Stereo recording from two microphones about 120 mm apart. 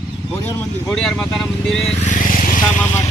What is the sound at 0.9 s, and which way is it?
Speech, 5° left (ahead or behind).